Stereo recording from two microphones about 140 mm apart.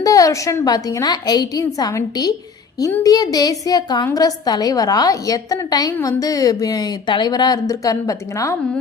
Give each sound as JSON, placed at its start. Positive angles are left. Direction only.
{"t": 0.0, "sound": "a woman's voice", "side_deg": 25}